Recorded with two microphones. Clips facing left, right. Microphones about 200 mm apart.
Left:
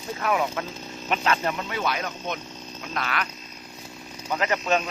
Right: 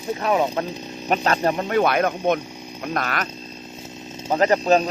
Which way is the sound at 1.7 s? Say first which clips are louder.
Right 10 dB; 55° right (ahead or behind).